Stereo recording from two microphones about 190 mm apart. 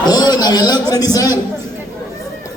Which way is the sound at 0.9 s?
20° left (ahead or behind).